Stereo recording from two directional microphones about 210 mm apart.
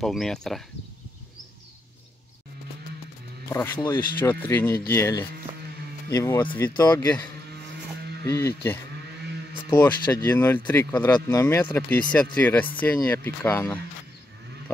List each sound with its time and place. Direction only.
0.0 s speech: centre (ahead or behind)
3.4 s speech: 15° left (ahead or behind)
4.3 s speech: 10° left (ahead or behind)
8.3 s speech: 15° left (ahead or behind)